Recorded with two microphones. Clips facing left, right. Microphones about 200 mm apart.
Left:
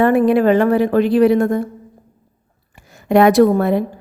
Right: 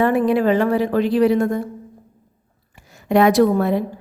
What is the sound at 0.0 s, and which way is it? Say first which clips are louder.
A woman's voice: left 4 dB; 55° left (ahead or behind).